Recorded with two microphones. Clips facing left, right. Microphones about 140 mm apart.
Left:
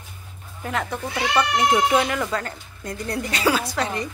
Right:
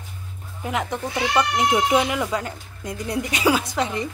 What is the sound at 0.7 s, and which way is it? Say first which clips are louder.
Speech: right 1 dB; 15° right (ahead or behind).